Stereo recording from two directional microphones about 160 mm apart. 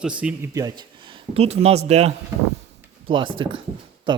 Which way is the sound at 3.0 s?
30° right (ahead or behind).